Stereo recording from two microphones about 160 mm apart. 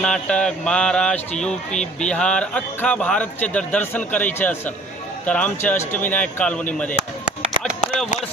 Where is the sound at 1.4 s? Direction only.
5° left (ahead or behind).